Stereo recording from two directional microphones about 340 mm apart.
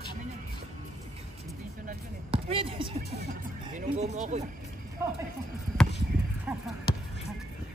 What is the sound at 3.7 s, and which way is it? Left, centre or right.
Speech, right.